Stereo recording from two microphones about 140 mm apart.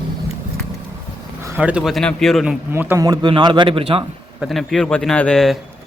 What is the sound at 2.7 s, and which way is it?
A man's voice, 15° right (ahead or behind).